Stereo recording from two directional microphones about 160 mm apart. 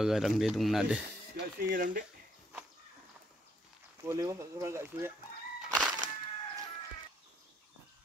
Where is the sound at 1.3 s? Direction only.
60° right (ahead or behind).